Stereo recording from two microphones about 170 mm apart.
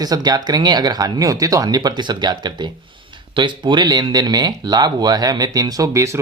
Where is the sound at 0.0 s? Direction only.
25° right (ahead or behind).